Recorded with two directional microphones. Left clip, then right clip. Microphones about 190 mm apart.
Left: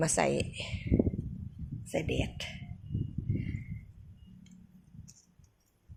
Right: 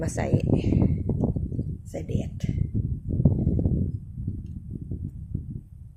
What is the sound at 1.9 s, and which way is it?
Speech, 5° left (ahead or behind).